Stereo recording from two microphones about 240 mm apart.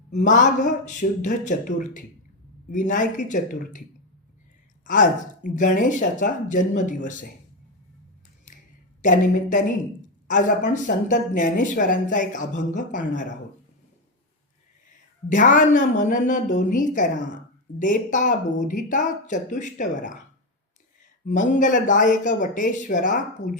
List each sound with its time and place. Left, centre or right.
0.1 s speech: left
4.9 s speech: left
9.0 s speech: left
15.3 s speech: left
21.2 s speech: left